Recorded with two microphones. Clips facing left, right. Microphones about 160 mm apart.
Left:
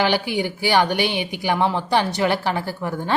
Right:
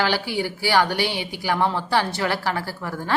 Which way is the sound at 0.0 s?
20° left (ahead or behind).